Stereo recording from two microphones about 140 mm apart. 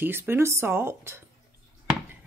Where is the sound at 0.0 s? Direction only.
15° right (ahead or behind).